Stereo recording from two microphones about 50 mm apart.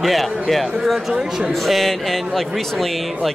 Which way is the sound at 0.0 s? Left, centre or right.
Centre.